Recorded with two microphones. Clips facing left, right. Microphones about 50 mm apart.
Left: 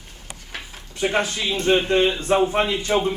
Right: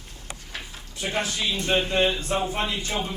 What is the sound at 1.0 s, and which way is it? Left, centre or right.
Speech, left.